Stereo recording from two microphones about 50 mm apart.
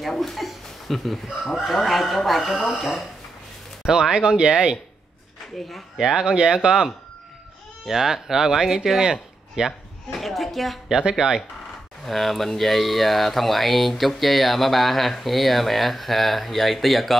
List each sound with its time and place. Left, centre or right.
0.0 s speech: centre
2.5 s speech: centre
2.8 s speech: centre
3.8 s speech: centre
5.6 s speech: centre
5.9 s speech: centre
10.1 s speech: centre
10.9 s speech: centre
12.1 s speech: centre